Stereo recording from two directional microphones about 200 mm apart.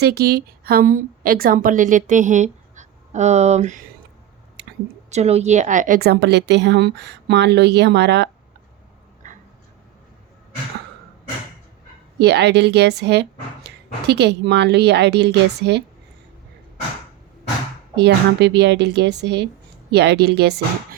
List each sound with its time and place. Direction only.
0.0 s a woman's voice: 55° right (ahead or behind); by 3.8 s 35° right (ahead or behind)
5.1 s a woman's voice: 35° right (ahead or behind); by 8.3 s 60° right (ahead or behind)
12.2 s a woman's voice: 60° right (ahead or behind)
17.9 s a woman's voice: 55° right (ahead or behind)